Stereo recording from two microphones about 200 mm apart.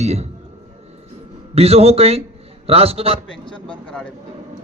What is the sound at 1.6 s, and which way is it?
A man's voice, 30° right (ahead or behind).